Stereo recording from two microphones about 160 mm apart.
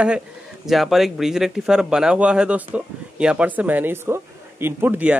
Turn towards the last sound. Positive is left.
turn(degrees=-10)  # may be behind; listen again after turning